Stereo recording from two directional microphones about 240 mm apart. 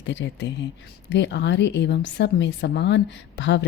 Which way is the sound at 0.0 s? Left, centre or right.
Left.